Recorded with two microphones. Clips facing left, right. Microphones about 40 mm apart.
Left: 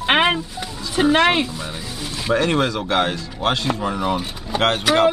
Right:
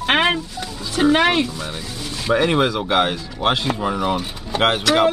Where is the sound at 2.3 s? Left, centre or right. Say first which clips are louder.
Right 2 dB; centre.